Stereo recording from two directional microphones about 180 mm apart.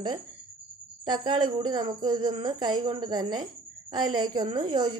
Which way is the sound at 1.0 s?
25° right (ahead or behind).